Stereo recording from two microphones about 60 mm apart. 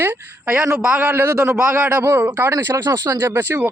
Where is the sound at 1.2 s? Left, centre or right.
Right.